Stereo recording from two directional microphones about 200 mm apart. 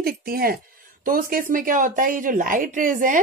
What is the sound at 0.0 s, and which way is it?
Speech, 50° right (ahead or behind).